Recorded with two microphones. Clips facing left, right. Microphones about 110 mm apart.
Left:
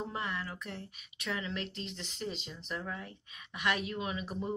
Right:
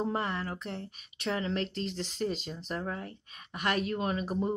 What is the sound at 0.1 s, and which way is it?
Speech, 35° right (ahead or behind).